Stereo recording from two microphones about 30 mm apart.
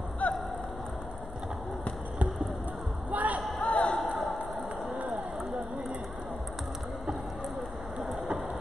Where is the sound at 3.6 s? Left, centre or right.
Left.